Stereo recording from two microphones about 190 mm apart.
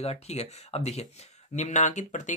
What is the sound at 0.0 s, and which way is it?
Speech, 35° left (ahead or behind).